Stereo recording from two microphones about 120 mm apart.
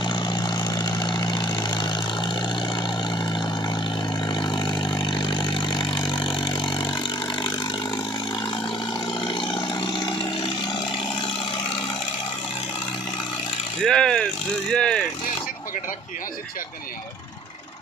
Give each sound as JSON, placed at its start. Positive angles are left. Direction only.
{"t": 0.0, "sound": "vehicle", "side_deg": 40}
{"t": 4.3, "sound": "vehicle", "side_deg": 40}
{"t": 9.2, "sound": "vehicle", "side_deg": 40}
{"t": 13.8, "sound": "vehicle", "side_deg": 5}
{"t": 14.7, "sound": "speech", "side_deg": 5}